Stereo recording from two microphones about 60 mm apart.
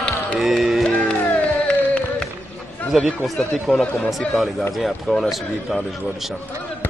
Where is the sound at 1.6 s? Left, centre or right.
Centre.